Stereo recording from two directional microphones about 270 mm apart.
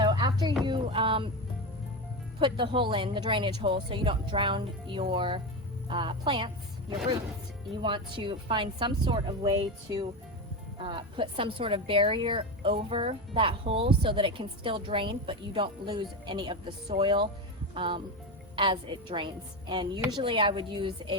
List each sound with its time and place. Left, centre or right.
0.0 s a sound: centre
2.4 s a woman's voice: centre
7.8 s a woman's voice: centre
10.8 s a woman's voice: centre